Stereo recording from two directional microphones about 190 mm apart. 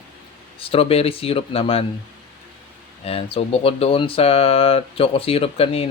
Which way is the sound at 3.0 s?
30° left (ahead or behind).